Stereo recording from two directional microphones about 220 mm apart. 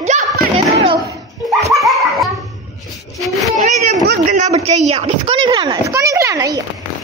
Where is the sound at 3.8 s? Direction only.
40° right (ahead or behind); by 6.6 s 15° right (ahead or behind).